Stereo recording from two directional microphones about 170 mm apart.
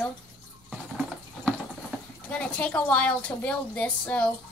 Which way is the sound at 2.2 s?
5° left (ahead or behind).